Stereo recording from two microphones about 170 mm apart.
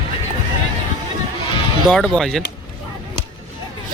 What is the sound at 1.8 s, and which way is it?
Speech, centre (ahead or behind).